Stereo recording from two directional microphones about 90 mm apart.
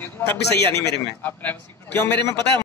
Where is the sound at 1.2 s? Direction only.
20° left (ahead or behind).